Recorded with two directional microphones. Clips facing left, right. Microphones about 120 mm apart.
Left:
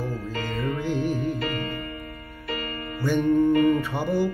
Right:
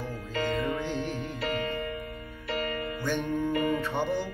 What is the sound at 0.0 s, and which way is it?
Music, 40° left (ahead or behind).